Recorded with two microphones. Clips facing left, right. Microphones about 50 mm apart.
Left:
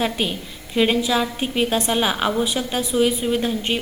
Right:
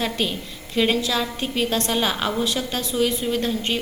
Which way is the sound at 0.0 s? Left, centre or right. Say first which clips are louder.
Left 2 dB; centre.